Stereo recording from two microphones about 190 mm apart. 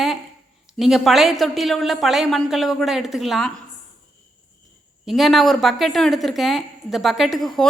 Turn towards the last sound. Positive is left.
turn(degrees=0)  # may be behind; listen again after turning